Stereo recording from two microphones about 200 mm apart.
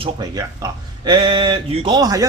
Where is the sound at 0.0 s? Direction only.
20° right (ahead or behind).